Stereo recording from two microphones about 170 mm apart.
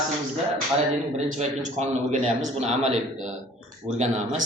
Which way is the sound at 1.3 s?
40° right (ahead or behind).